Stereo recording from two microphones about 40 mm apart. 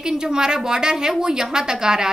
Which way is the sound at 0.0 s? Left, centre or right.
Centre.